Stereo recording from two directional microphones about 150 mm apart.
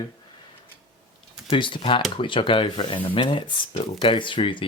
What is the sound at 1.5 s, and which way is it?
Speech, 35° left (ahead or behind).